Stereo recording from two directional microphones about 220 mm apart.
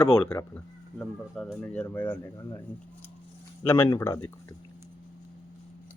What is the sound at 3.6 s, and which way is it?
Speech, 10° left (ahead or behind).